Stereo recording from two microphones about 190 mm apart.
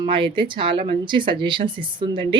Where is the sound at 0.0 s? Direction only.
25° right (ahead or behind).